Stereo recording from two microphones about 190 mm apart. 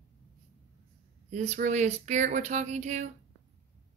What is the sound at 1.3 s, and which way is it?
Speech, 40° right (ahead or behind).